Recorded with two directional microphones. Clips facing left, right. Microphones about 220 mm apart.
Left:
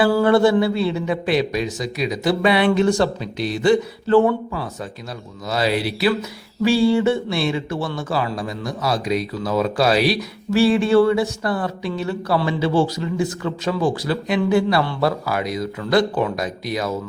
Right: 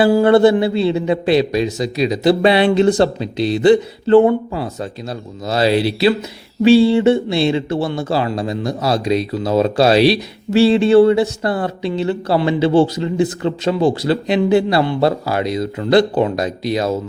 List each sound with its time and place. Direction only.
0.0 s speech: 25° right (ahead or behind)
5.5 s speech: 30° right (ahead or behind)